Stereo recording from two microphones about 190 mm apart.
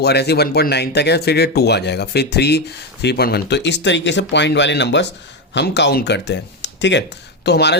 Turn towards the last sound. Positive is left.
turn(degrees=60)  # may be behind; listen again after turning